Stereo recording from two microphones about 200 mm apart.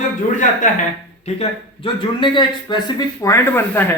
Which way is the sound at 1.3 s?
35° left (ahead or behind).